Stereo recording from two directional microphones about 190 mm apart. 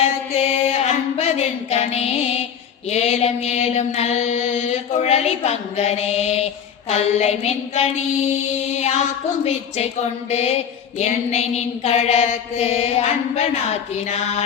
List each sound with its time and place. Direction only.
0.0 s music: 35° left (ahead or behind)
2.9 s mantra: 35° left (ahead or behind)
9.4 s mantra: 35° left (ahead or behind)